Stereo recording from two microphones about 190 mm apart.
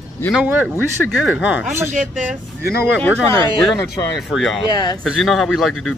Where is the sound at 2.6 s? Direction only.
55° left (ahead or behind).